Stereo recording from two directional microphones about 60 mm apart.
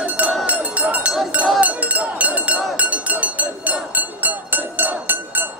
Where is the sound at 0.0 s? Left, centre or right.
Right.